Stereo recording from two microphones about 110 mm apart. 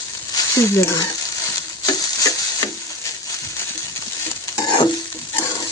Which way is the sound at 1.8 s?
35° left (ahead or behind).